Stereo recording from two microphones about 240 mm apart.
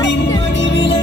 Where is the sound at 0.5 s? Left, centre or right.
Left.